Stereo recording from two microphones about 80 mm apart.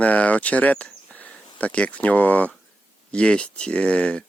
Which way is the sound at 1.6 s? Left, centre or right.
Centre.